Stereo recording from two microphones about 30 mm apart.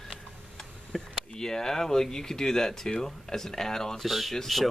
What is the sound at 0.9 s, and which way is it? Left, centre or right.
Speech, centre.